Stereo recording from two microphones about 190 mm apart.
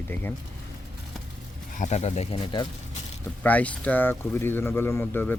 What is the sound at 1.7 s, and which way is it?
Speech, 35° left (ahead or behind).